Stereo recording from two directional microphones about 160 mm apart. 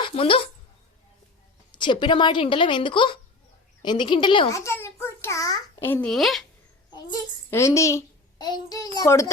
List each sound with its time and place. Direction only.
0.0 s a woman's voice: 35° left (ahead or behind)
1.7 s a woman's voice: 30° left (ahead or behind)
4.5 s a child's voice: 15° left (ahead or behind)
6.1 s a child's voice: centre (ahead or behind)
6.9 s a child's voice: 20° left (ahead or behind)